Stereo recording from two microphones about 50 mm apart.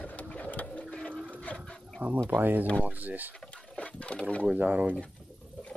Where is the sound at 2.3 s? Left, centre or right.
Right.